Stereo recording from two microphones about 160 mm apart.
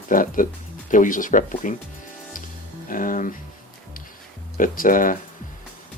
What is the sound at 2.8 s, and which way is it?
Music, 60° left (ahead or behind).